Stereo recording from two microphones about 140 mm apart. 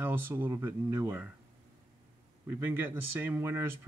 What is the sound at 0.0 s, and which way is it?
Speech, 15° right (ahead or behind).